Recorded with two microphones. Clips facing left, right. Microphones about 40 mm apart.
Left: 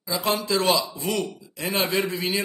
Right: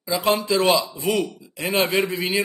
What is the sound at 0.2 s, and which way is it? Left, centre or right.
A man's voice, centre.